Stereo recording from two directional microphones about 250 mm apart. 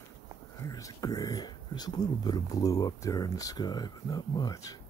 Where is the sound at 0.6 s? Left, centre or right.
Centre.